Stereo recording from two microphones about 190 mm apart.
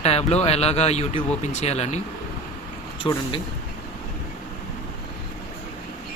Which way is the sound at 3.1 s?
25° left (ahead or behind).